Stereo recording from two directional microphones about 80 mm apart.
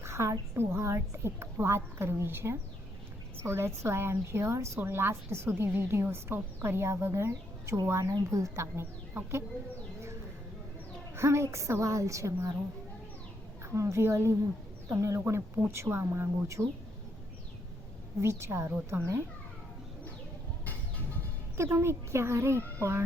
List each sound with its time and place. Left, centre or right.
0.0 s a woman's voice: right
11.1 s a woman's voice: right
13.7 s a woman's voice: right
16.6 s speech: centre
18.2 s a woman's voice: right
21.6 s a woman's voice: right